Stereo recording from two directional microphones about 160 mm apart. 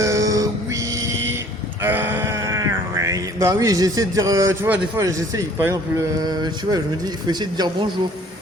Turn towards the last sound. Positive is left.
turn(degrees=-25)  # may be behind; listen again after turning